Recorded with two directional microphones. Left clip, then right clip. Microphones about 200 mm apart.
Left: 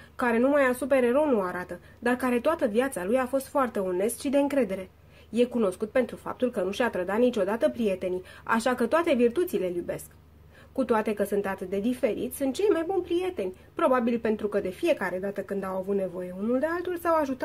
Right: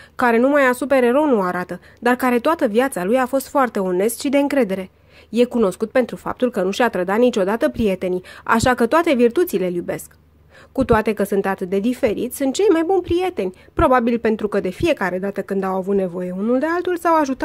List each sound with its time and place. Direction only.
0.2 s a woman's voice: 40° right (ahead or behind)